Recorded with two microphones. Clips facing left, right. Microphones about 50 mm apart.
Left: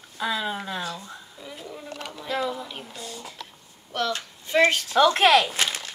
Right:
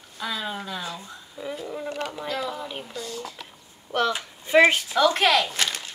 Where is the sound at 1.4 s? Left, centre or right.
Centre.